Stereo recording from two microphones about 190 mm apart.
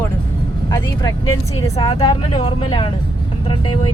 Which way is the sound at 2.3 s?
30° left (ahead or behind).